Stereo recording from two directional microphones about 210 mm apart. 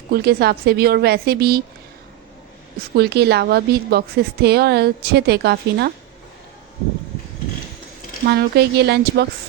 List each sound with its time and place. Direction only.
0.1 s a woman's voice: 50° right (ahead or behind)
2.9 s a woman's voice: 50° right (ahead or behind)
8.3 s a woman's voice: 50° right (ahead or behind)